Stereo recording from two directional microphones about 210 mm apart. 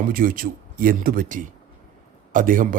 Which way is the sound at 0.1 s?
40° right (ahead or behind).